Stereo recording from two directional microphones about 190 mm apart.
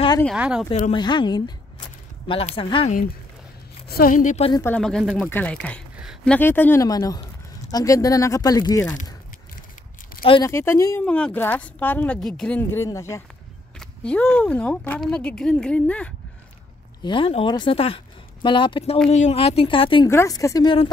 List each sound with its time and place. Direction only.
0.4 s speech: 5° right (ahead or behind)
0.9 s speech: 25° left (ahead or behind)
3.9 s a woman's voice: 50° left (ahead or behind)
4.5 s speech: 15° left (ahead or behind)
4.7 s speech: centre (ahead or behind); by 8.8 s 20° left (ahead or behind)
10.2 s speech: 25° left (ahead or behind)
10.5 s speech: 15° left (ahead or behind)
17.0 s speech: 25° left (ahead or behind)
20.1 s speech: 15° left (ahead or behind)